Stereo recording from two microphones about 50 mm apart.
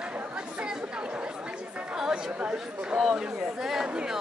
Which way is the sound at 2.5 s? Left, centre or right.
Centre.